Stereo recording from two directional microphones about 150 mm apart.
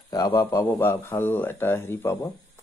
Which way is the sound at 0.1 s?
20° left (ahead or behind).